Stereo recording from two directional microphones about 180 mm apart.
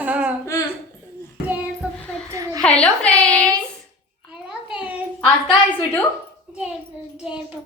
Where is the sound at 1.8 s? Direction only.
5° right (ahead or behind).